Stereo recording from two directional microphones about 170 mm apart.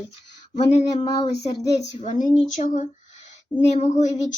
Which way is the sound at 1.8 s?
40° left (ahead or behind).